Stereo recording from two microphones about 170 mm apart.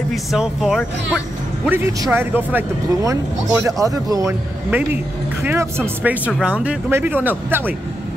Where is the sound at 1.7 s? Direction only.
15° right (ahead or behind).